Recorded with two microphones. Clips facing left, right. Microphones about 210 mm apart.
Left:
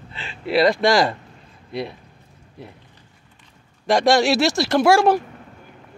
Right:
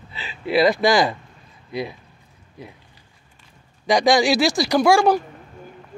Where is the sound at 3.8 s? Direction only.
Centre (ahead or behind).